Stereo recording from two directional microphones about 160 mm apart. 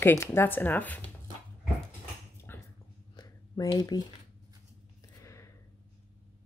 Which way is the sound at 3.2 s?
25° left (ahead or behind).